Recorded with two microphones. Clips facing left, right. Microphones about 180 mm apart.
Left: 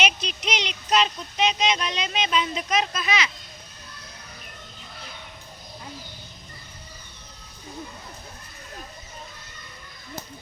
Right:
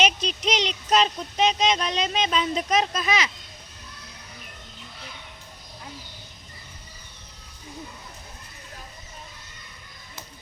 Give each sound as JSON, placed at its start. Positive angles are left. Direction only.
{"t": 0.2, "sound": "speech", "side_deg": -40}